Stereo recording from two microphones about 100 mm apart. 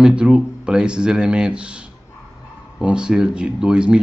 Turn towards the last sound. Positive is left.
turn(degrees=-10)  # may be behind; listen again after turning